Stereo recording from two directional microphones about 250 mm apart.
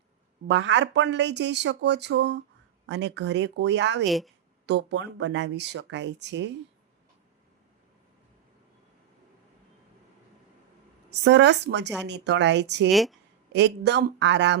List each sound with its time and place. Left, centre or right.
0.4 s speech: right
4.0 s a woman's voice: centre
4.6 s speech: right
11.1 s speech: right
12.9 s a woman's voice: centre
13.5 s speech: right